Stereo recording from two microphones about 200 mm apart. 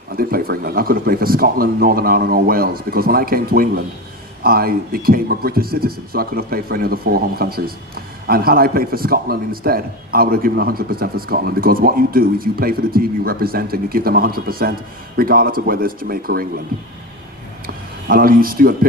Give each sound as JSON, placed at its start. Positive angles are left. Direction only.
{"t": 0.2, "sound": "speech", "side_deg": -45}
{"t": 18.1, "sound": "speech", "side_deg": -45}